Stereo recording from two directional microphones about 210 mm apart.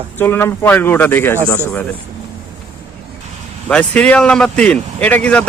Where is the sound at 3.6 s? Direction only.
5° left (ahead or behind).